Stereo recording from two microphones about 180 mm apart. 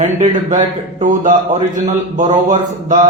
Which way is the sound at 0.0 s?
45° right (ahead or behind).